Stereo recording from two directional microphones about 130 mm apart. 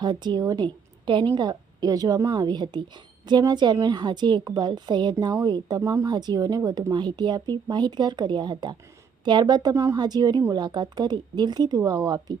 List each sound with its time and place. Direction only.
0.0 s a woman's voice: 35° right (ahead or behind)